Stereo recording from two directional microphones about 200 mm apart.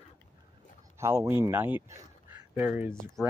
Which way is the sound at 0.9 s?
15° right (ahead or behind).